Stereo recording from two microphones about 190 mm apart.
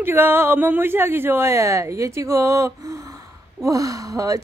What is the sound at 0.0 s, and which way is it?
Speech, 10° right (ahead or behind).